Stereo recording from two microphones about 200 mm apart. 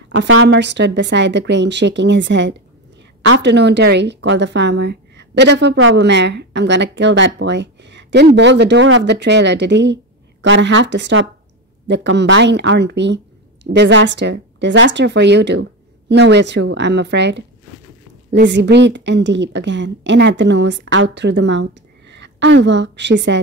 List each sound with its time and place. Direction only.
0.1 s a woman's voice: 80° right
0.5 s a woman's voice: 60° right (ahead or behind)